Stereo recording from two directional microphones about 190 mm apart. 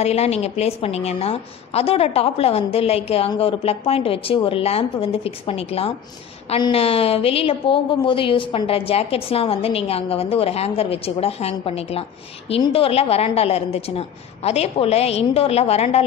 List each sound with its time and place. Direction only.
0.0 s a woman's voice: 35° left (ahead or behind)